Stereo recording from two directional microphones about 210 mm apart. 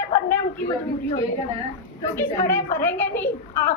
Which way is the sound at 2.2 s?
10° left (ahead or behind).